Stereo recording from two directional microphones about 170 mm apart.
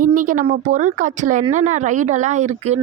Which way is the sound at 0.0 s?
50° right (ahead or behind).